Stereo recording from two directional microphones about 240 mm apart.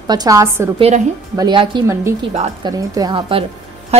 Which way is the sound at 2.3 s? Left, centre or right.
Right.